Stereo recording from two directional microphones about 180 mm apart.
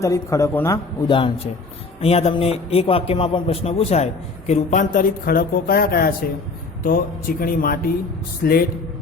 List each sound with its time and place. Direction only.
0.0 s a man's voice: 15° left (ahead or behind)
2.0 s a man's voice: 35° left (ahead or behind); by 8.6 s 60° left (ahead or behind)